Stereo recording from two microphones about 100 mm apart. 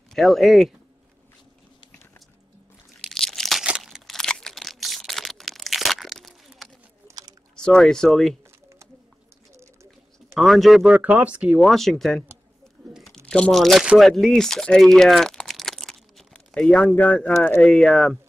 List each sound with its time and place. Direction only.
0.1 s speech: centre (ahead or behind)
3.0 s crunch: 5° left (ahead or behind)
3.6 s crumpling: 5° right (ahead or behind)
7.1 s a sound: 40° right (ahead or behind)
7.5 s speech: 10° left (ahead or behind)
10.3 s speech: centre (ahead or behind)
11.6 s speech: centre (ahead or behind)
12.9 s a sound: centre (ahead or behind)
13.3 s speech: 5° left (ahead or behind)